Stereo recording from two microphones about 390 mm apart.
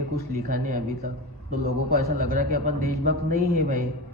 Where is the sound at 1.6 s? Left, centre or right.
Right.